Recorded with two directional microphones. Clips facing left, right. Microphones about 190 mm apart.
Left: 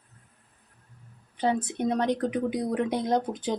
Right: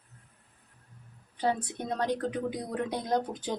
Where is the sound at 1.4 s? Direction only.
20° left (ahead or behind).